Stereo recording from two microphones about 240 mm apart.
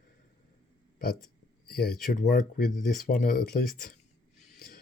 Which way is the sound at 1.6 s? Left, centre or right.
Left.